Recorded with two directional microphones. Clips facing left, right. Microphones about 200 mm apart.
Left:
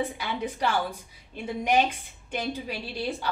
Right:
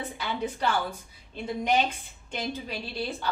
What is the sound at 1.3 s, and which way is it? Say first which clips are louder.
A woman's voice: left 1 dB; 10° left (ahead or behind).